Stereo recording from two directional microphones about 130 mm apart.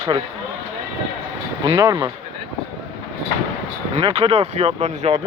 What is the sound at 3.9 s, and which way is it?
Speech, 50° right (ahead or behind).